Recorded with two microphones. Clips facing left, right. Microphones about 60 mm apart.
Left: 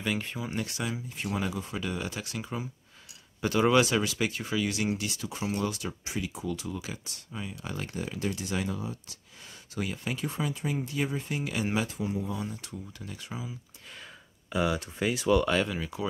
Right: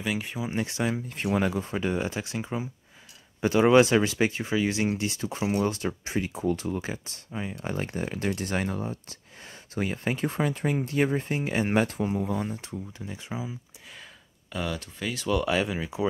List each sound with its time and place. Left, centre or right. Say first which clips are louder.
0.0 s speech: right 2 dB; centre
0.5 s speech: right 7 dB; right
1.0 s speech: right 6 dB; right
12.6 s speech: right 4 dB; right
14.5 s speech: left 4 dB; centre
15.2 s speech: even; centre